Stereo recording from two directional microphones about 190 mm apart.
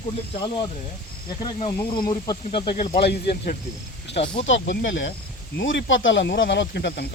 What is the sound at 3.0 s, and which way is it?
Speech, 55° left (ahead or behind).